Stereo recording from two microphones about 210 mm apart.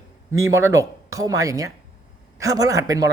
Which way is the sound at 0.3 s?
15° right (ahead or behind).